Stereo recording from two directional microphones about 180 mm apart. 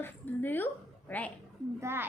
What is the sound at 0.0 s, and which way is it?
A woman's voice, 10° left (ahead or behind).